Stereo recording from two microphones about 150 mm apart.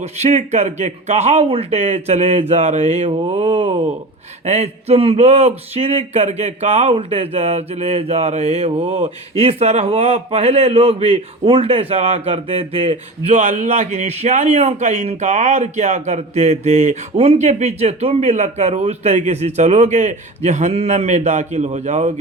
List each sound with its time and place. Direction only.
0.0 s speech: 45° right (ahead or behind)